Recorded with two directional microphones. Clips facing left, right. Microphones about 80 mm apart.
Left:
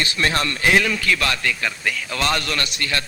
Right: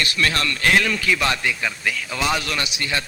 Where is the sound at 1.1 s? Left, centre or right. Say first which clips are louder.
Right 1 dB; centre.